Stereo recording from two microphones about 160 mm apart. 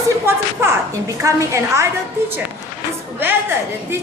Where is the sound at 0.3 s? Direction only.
15° right (ahead or behind).